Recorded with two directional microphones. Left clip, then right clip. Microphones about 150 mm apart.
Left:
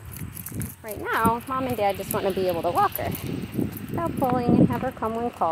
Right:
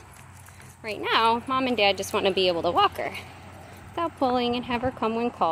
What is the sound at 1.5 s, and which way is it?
Speech, 30° right (ahead or behind).